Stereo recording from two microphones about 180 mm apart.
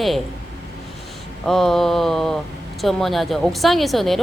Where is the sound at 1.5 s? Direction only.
Centre (ahead or behind).